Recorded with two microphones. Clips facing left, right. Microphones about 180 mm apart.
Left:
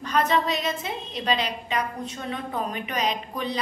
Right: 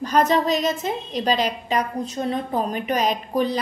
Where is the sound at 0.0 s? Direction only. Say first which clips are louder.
Right 4 dB; 40° right (ahead or behind).